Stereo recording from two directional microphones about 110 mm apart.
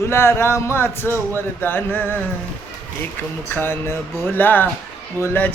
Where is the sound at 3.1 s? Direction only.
20° left (ahead or behind).